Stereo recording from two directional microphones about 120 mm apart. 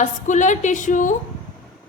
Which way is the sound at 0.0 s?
90° left.